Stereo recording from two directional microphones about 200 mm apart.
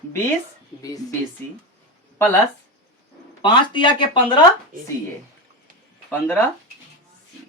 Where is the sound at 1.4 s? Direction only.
10° left (ahead or behind).